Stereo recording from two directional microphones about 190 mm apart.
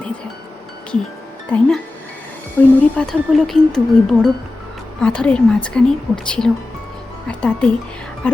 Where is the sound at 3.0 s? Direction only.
Centre (ahead or behind).